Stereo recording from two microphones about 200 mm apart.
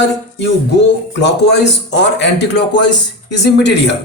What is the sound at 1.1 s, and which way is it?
A man's voice, 60° left (ahead or behind).